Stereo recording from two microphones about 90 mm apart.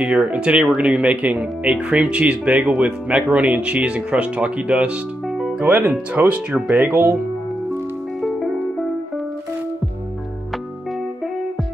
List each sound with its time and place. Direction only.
0.0 s speech: 15° right (ahead or behind)